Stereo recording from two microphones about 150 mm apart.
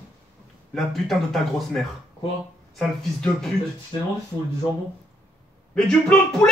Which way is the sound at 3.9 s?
35° left (ahead or behind).